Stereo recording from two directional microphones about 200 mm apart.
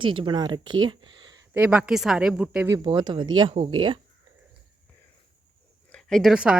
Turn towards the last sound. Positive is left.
turn(degrees=-5)  # may be behind; listen again after turning